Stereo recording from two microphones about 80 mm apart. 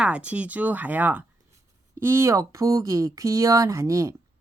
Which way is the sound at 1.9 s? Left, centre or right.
Right.